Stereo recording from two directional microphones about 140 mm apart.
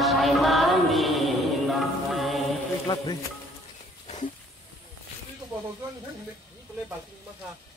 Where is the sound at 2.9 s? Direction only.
30° left (ahead or behind).